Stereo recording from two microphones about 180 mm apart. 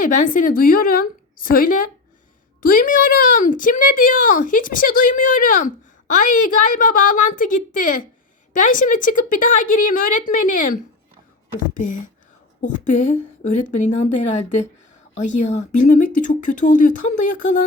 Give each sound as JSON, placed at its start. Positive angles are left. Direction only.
{"t": 0.0, "sound": "speech", "side_deg": 45}